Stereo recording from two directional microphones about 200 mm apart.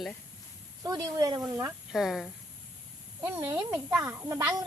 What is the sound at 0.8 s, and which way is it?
Speech, 20° right (ahead or behind).